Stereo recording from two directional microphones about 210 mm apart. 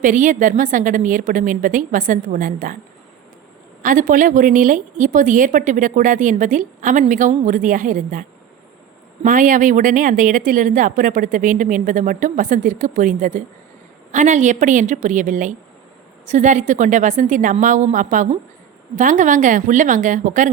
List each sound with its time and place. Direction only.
0.0 s a woman's voice: 40° right (ahead or behind)
3.8 s a woman's voice: 40° right (ahead or behind)
9.2 s a woman's voice: 40° right (ahead or behind)